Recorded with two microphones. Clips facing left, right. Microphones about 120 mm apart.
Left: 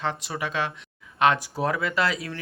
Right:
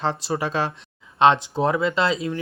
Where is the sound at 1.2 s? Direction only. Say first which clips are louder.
Right 5 dB; 25° right (ahead or behind).